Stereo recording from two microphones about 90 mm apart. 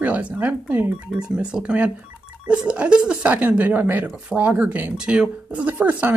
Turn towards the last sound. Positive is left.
turn(degrees=-20)  # may be behind; listen again after turning